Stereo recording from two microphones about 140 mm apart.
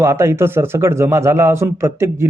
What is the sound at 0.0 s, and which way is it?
A man's voice, 20° right (ahead or behind).